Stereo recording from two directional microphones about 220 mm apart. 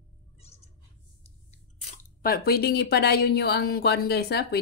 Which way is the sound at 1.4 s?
40° left (ahead or behind).